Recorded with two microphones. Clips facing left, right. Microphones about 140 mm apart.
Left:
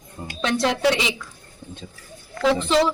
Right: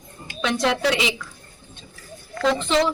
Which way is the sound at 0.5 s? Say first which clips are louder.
Left 1 dB; centre (ahead or behind).